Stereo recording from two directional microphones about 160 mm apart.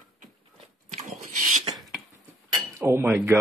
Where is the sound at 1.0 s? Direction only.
50° right (ahead or behind).